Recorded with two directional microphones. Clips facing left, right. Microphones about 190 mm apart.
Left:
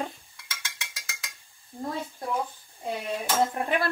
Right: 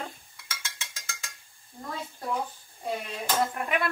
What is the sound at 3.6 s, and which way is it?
Speech, 30° left (ahead or behind).